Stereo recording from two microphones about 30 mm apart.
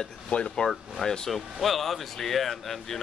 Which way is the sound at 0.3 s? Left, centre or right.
Left.